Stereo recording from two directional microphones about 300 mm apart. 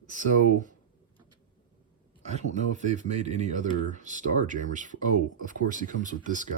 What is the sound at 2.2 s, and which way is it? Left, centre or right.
Speech, right.